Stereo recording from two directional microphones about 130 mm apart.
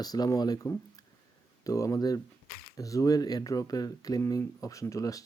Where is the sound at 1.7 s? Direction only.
25° left (ahead or behind).